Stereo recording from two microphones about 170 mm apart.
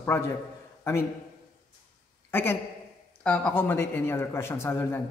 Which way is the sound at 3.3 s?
10° left (ahead or behind).